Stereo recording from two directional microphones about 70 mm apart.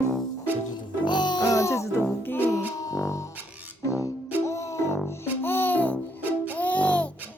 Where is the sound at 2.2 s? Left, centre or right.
Left.